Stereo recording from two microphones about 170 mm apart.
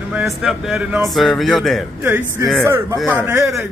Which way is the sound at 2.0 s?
10° right (ahead or behind).